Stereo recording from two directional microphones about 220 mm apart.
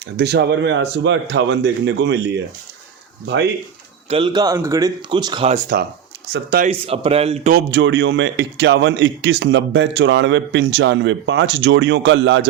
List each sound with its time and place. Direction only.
0.2 s a man's voice: 50° right (ahead or behind)
4.1 s speech: 20° right (ahead or behind)
6.3 s speech: 40° right (ahead or behind)
6.7 s speech: 25° right (ahead or behind)
7.5 s a man's voice: 55° right (ahead or behind)